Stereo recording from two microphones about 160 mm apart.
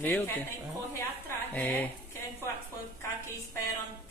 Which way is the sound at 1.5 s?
10° left (ahead or behind).